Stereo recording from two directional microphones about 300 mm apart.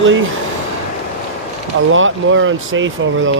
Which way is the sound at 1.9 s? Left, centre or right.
Right.